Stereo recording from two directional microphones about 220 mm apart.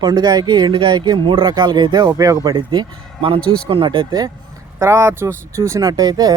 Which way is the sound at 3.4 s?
5° left (ahead or behind).